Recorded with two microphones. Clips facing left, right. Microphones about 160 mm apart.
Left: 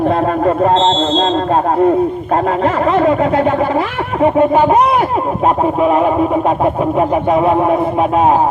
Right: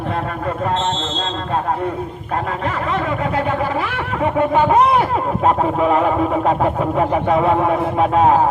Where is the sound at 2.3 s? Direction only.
30° left (ahead or behind).